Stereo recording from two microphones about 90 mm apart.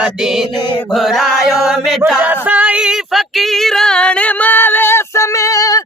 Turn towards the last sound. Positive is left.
turn(degrees=40)  # may be behind; listen again after turning